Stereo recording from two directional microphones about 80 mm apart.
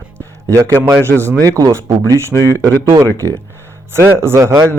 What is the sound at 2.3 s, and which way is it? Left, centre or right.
Speech, left.